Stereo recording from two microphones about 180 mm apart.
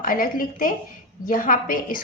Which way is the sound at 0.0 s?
50° left (ahead or behind).